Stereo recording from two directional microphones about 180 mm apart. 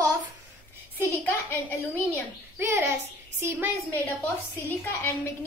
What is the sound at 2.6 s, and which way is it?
A woman's voice, 15° right (ahead or behind).